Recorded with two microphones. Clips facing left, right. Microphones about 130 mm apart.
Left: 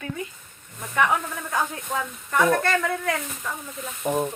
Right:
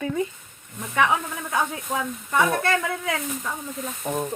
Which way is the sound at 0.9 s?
20° right (ahead or behind).